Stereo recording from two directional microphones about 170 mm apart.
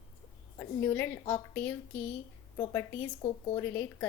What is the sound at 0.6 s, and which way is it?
Speech, 10° left (ahead or behind).